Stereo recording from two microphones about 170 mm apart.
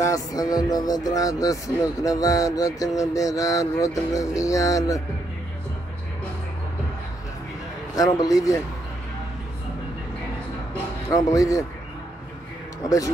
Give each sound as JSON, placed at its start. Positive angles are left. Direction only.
{"t": 0.0, "sound": "speech", "side_deg": 20}
{"t": 7.9, "sound": "speech", "side_deg": 20}
{"t": 11.1, "sound": "speech", "side_deg": 20}